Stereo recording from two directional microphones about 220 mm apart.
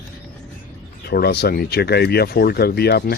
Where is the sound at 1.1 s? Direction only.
45° left (ahead or behind).